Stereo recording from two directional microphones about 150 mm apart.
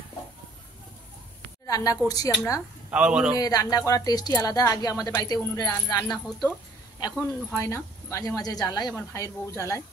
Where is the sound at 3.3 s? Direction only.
25° left (ahead or behind).